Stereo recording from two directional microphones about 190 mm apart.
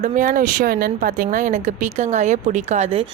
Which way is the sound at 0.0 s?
40° right (ahead or behind).